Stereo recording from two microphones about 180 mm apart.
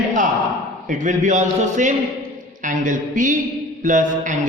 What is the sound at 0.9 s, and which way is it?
A man's voice, 45° right (ahead or behind).